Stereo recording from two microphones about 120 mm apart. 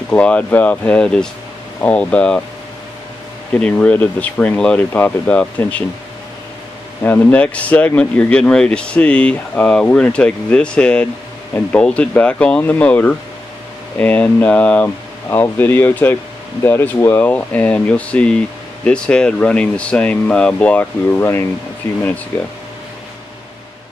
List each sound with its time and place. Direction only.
0.1 s a man's voice: 10° left (ahead or behind)
3.5 s a man's voice: 10° left (ahead or behind)
7.0 s a man's voice: 15° left (ahead or behind)